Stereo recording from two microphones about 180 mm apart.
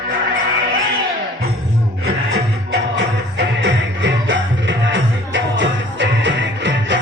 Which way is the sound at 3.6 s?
90° right.